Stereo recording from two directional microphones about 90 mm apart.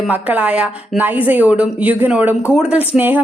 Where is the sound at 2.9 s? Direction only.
20° right (ahead or behind).